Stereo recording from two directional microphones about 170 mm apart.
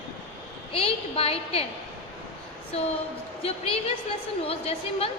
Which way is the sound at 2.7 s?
35° left (ahead or behind).